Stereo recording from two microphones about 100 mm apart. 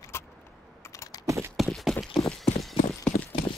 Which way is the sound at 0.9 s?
30° left (ahead or behind).